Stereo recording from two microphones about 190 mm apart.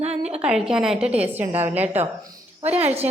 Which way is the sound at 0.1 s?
5° right (ahead or behind).